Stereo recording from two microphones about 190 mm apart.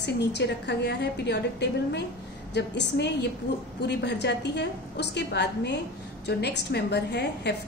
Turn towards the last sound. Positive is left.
turn(degrees=60)  # may be behind; listen again after turning